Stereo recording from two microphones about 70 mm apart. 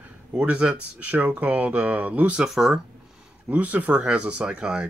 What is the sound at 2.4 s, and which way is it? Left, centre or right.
Speech, centre.